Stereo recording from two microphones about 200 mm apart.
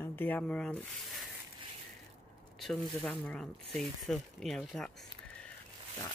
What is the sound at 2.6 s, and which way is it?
Speech, centre (ahead or behind).